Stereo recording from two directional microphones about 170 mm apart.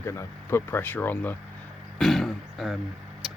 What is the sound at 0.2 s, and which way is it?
Speech, 15° left (ahead or behind).